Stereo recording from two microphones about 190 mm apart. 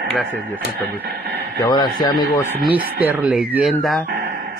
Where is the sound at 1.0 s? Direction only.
60° right (ahead or behind).